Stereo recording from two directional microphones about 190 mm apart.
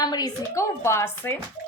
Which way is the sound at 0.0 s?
20° left (ahead or behind).